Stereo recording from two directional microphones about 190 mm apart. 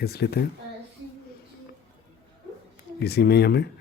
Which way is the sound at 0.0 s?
60° left (ahead or behind).